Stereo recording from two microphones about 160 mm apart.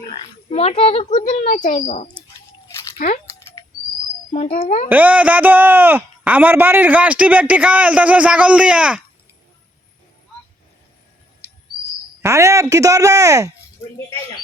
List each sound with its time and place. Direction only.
0.5 s a child's voice: 40° left (ahead or behind)
3.6 s a sound: 20° left (ahead or behind)
4.3 s a child's voice: 45° left (ahead or behind)
4.9 s speech: 10° right (ahead or behind)
12.2 s speech: 20° right (ahead or behind)